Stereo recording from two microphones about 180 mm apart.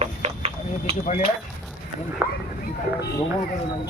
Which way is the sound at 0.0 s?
35° right (ahead or behind).